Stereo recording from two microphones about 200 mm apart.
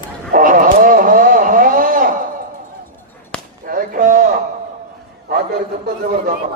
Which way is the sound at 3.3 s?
5° left (ahead or behind).